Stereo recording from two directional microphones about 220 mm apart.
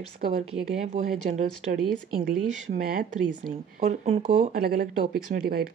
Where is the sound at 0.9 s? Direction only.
35° right (ahead or behind).